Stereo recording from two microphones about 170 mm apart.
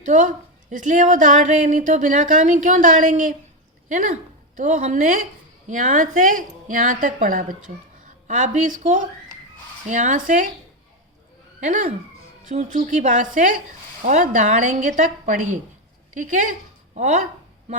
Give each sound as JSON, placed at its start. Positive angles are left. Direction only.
{"t": 0.0, "sound": "a woman's voice", "side_deg": -50}
{"t": 11.6, "sound": "a woman's voice", "side_deg": -45}